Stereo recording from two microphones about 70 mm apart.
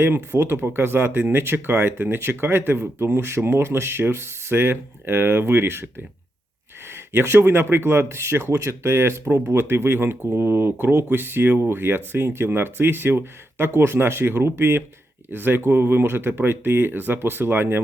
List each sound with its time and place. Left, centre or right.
0.0 s speech: right